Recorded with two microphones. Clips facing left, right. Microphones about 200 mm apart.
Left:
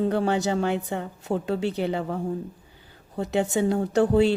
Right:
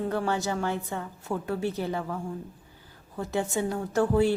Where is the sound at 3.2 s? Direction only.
70° left (ahead or behind).